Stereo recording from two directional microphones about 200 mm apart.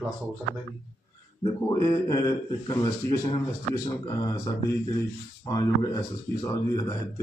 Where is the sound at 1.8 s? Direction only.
15° left (ahead or behind).